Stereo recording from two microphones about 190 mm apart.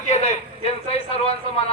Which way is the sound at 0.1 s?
35° left (ahead or behind).